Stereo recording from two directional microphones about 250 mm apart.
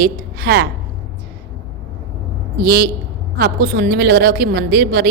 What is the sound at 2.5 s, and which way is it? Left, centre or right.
A woman's voice, right.